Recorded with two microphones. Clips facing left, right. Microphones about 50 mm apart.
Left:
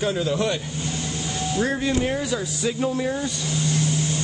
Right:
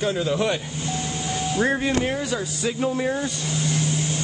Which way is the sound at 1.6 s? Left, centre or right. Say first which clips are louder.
Right 1 dB; right.